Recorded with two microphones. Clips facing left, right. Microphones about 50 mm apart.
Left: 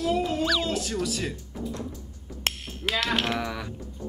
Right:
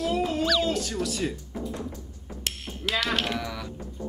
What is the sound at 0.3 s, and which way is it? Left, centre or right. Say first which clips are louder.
Speech: right 1 dB; centre.